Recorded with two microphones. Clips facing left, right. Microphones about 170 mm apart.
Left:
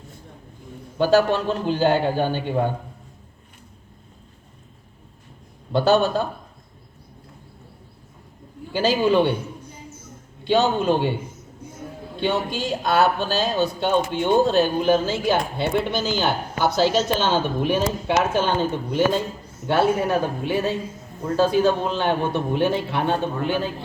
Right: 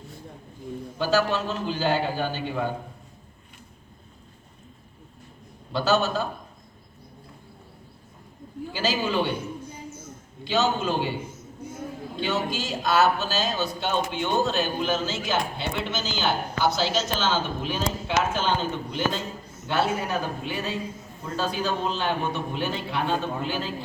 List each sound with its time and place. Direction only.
0.9 s a man's voice: 55° left (ahead or behind)
5.7 s a man's voice: 55° left (ahead or behind)
8.7 s a man's voice: 55° left (ahead or behind)
10.4 s a man's voice: 55° left (ahead or behind)
12.2 s a man's voice: 55° left (ahead or behind)